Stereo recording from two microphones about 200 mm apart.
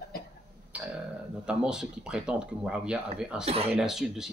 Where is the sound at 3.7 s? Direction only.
Centre (ahead or behind).